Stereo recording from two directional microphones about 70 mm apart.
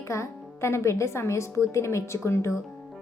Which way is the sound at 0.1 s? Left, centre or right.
Left.